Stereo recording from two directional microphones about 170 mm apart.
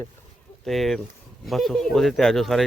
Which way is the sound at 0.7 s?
Centre (ahead or behind).